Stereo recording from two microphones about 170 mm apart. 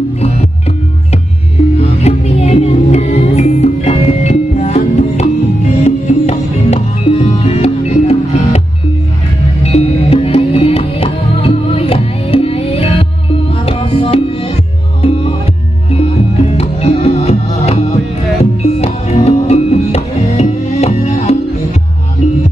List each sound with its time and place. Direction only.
1.8 s music: 35° left (ahead or behind)
16.5 s music: 35° left (ahead or behind)